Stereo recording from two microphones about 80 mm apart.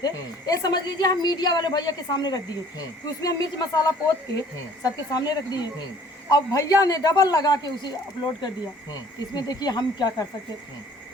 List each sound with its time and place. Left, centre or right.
0.0 s a woman's voice: left